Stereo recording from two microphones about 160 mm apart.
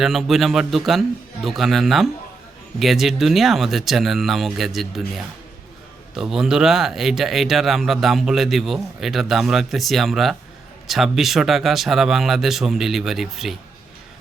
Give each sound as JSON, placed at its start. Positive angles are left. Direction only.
{"t": 0.0, "sound": "speech", "side_deg": 0}